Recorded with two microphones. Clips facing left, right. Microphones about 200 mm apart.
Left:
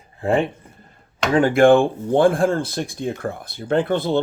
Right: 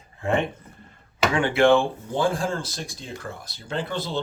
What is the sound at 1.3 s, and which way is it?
Speech, 45° left (ahead or behind).